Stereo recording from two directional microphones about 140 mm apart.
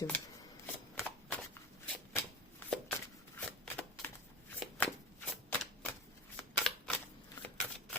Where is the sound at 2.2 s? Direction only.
20° left (ahead or behind).